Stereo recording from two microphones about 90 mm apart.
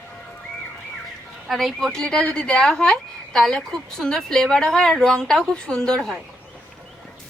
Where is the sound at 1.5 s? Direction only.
Centre (ahead or behind).